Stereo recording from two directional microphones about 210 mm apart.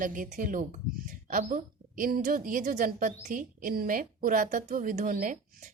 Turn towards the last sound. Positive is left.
turn(degrees=-40)  # may be behind; listen again after turning